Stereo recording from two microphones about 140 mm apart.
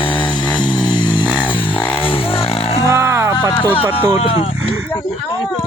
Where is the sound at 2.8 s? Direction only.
20° right (ahead or behind).